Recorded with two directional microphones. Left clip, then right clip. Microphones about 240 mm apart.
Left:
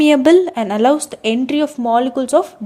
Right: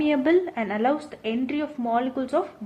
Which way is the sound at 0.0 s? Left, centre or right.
Left.